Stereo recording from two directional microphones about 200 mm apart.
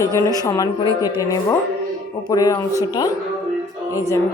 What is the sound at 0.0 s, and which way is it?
Speech, 15° left (ahead or behind).